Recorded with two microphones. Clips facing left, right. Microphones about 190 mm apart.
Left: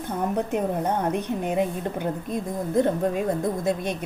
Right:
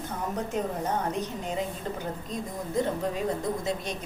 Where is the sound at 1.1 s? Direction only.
60° left (ahead or behind).